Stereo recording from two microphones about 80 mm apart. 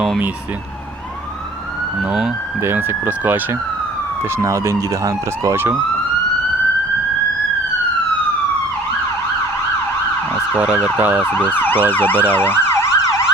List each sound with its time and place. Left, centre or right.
2.6 s speech: right
4.4 s speech: right
10.6 s speech: centre
11.2 s emergency vehicle: left
13.0 s emergency vehicle: left